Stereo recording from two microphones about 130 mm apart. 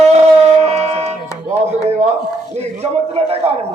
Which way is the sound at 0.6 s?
55° right (ahead or behind).